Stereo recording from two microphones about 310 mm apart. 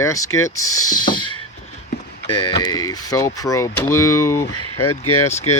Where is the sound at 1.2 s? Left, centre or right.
Left.